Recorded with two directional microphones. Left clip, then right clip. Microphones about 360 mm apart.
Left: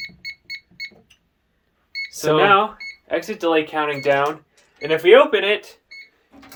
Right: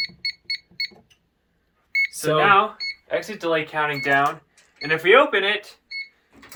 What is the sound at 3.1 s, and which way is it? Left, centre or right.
Speech, left.